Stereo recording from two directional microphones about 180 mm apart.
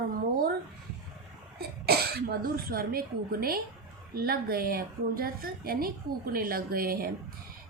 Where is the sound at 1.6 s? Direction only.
60° right (ahead or behind).